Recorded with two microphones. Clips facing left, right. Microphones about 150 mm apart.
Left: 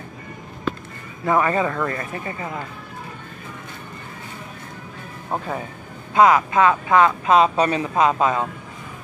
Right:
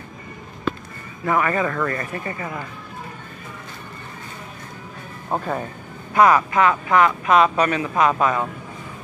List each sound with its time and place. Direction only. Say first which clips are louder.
1.2 s speech: left 1 dB; 25° left (ahead or behind)
1.7 s speech: right 1 dB; 10° left (ahead or behind)
6.1 s speech: left 1 dB; 20° left (ahead or behind)